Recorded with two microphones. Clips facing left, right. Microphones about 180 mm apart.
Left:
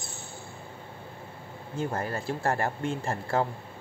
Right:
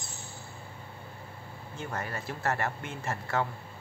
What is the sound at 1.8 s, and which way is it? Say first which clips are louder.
Speech: left 6 dB; 35° left (ahead or behind).